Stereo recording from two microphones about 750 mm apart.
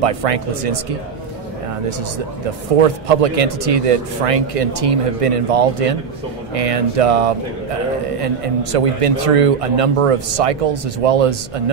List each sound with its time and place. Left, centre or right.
0.0 s speech: right
2.8 s speech: right
8.7 s speech: right